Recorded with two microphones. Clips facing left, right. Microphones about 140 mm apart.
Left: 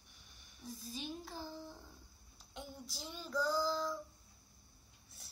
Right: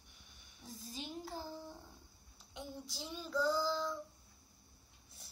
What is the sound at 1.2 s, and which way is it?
A child's voice, 15° right (ahead or behind).